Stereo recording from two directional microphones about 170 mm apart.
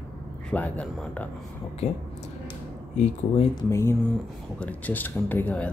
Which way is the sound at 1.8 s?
40° left (ahead or behind).